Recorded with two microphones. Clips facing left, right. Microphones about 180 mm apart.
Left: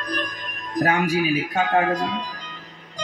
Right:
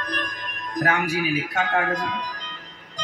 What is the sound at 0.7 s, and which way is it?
Speech, 35° left (ahead or behind).